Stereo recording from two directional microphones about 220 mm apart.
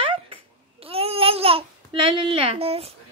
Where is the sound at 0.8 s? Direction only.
25° right (ahead or behind).